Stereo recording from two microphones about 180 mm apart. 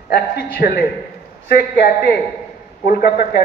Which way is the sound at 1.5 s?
70° left (ahead or behind).